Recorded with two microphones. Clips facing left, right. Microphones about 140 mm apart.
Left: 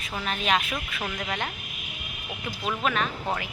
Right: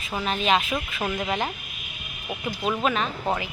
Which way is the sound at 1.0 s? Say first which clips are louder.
Right 6 dB; 25° right (ahead or behind).